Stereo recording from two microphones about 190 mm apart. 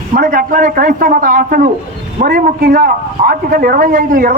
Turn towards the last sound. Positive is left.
turn(degrees=-45)  # may be behind; listen again after turning